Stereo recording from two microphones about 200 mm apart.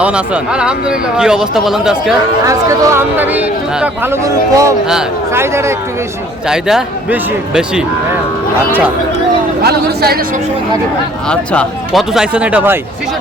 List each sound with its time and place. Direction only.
0.0 s speech: 5° right (ahead or behind)
2.4 s speech: 15° right (ahead or behind)
9.6 s speech: 50° right (ahead or behind)
11.3 s speech: centre (ahead or behind)